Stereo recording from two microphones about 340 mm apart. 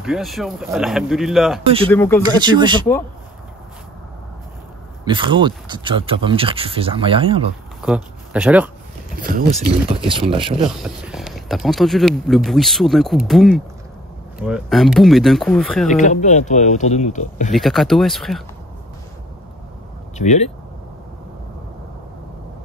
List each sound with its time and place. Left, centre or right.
0.0 s speech: centre
2.2 s speech: centre
5.0 s speech: centre
7.8 s speech: centre
9.9 s speech: centre
10.8 s speech: centre
16.0 s speech: left
17.5 s speech: centre
20.2 s speech: centre